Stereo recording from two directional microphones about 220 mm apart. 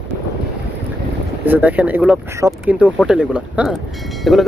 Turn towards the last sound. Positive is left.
turn(degrees=0)  # may be behind; listen again after turning